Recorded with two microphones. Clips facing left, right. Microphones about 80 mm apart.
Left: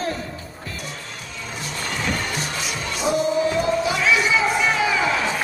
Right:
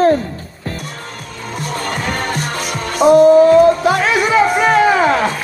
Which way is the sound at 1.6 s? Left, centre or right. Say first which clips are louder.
Right 7 dB; right.